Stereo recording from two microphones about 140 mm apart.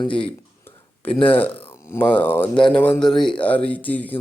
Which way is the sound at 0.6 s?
10° left (ahead or behind).